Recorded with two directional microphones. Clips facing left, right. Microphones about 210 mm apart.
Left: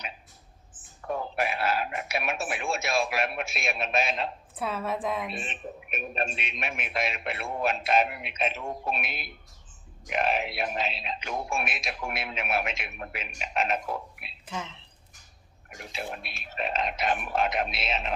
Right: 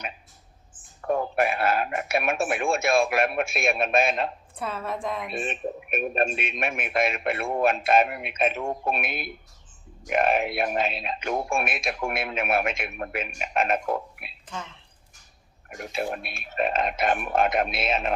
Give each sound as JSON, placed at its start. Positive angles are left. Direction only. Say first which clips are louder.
{"t": 1.0, "sound": "speech", "louder": "right 6 dB", "side_deg": -50}
{"t": 4.5, "sound": "a woman's voice", "louder": "left 4 dB", "side_deg": 0}
{"t": 5.3, "sound": "speech", "louder": "right 7 dB", "side_deg": -50}
{"t": 14.4, "sound": "speech", "louder": "left 1 dB", "side_deg": 10}
{"t": 15.7, "sound": "speech", "louder": "right 7 dB", "side_deg": -55}